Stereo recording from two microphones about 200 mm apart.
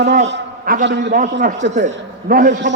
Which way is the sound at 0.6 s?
45° right (ahead or behind).